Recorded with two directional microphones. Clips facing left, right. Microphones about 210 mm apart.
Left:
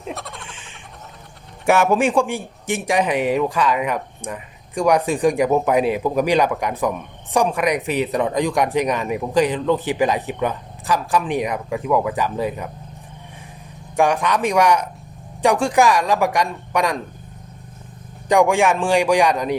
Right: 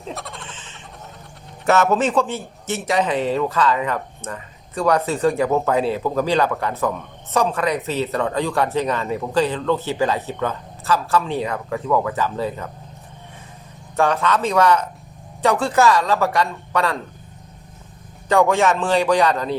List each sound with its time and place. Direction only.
0.1 s a sound: centre (ahead or behind)
1.6 s a man's voice: 10° left (ahead or behind)
13.9 s a man's voice: 15° left (ahead or behind)
18.3 s a man's voice: 15° left (ahead or behind)